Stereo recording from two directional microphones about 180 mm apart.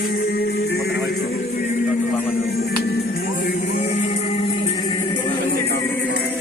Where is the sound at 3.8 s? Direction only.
40° left (ahead or behind).